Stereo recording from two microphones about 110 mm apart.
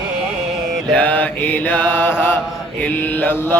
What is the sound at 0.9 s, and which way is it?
Mantra, 15° left (ahead or behind).